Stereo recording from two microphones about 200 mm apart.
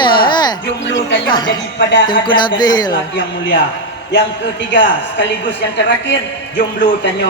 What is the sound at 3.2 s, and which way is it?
Speech, 65° left (ahead or behind).